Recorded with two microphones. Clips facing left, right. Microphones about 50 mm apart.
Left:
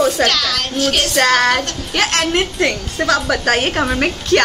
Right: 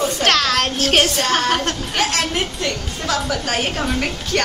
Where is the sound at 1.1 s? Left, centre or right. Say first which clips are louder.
Left 5 dB; left.